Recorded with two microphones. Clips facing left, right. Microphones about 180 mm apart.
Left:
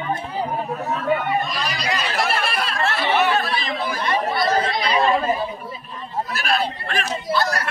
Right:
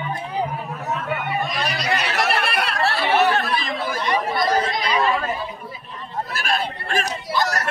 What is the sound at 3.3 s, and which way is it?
Chatter, 50° right (ahead or behind).